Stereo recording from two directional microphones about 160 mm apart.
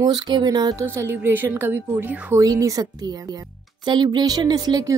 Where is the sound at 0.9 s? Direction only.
15° right (ahead or behind).